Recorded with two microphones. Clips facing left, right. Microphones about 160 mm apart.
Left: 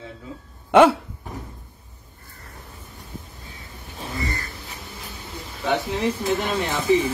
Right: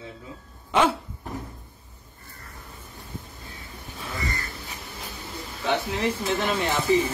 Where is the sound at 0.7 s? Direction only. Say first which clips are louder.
Left 8 dB; 65° left (ahead or behind).